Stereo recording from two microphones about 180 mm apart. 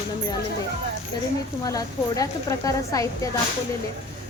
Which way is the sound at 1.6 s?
20° left (ahead or behind).